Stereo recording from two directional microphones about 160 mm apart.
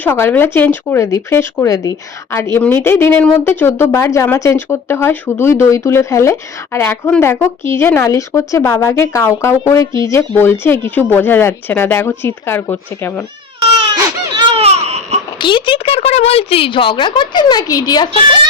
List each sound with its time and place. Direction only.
0.0 s speech: 10° left (ahead or behind)
13.6 s baby cry: 35° right (ahead or behind)
15.4 s a woman's voice: 30° left (ahead or behind)